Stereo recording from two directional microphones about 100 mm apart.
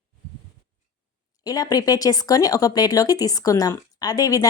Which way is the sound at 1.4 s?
40° left (ahead or behind).